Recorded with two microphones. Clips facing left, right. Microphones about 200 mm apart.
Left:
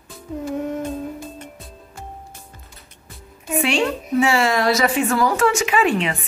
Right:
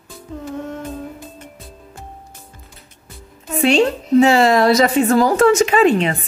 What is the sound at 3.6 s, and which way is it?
Speech, 40° right (ahead or behind).